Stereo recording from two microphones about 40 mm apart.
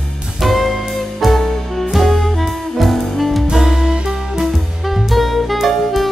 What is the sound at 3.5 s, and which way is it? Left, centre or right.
Music, centre.